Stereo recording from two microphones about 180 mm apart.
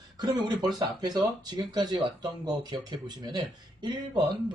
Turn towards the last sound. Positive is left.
turn(degrees=-25)  # may be behind; listen again after turning